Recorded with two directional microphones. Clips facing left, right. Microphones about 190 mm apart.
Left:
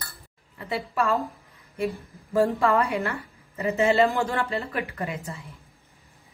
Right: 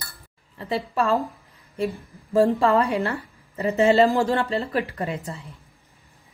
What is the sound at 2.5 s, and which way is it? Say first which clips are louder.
Speech: right 3 dB; 35° right (ahead or behind).